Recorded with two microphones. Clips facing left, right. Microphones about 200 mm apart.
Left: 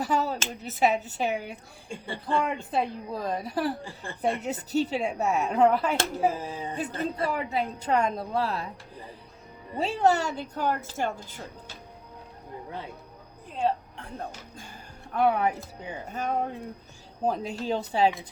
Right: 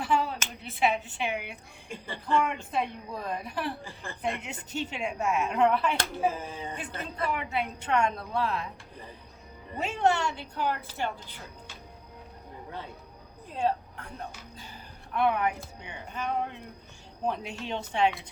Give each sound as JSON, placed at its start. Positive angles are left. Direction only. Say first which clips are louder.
{"t": 0.0, "sound": "speech", "louder": "left 1 dB", "side_deg": 40}
{"t": 9.7, "sound": "speech", "louder": "left 3 dB", "side_deg": 35}
{"t": 14.2, "sound": "speech", "louder": "left 4 dB", "side_deg": 50}